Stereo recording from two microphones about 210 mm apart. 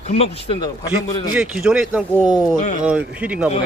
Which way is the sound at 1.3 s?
5° right (ahead or behind).